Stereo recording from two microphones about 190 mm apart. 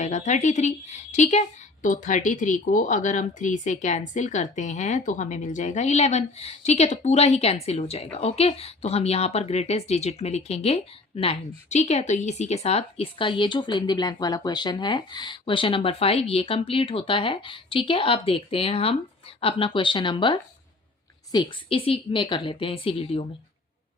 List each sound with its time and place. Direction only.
0.0 s a woman's voice: 40° left (ahead or behind)